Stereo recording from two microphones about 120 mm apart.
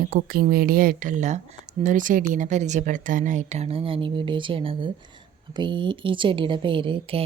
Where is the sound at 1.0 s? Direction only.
90° right.